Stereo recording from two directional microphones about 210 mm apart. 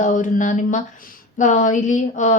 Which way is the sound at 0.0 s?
35° left (ahead or behind).